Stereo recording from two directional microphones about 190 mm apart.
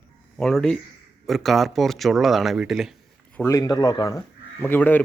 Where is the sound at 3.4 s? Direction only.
15° left (ahead or behind).